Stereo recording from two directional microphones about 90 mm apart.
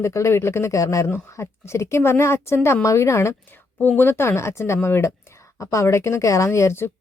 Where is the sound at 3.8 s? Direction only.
20° left (ahead or behind).